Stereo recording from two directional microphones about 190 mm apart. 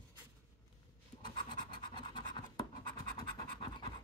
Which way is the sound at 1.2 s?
25° left (ahead or behind).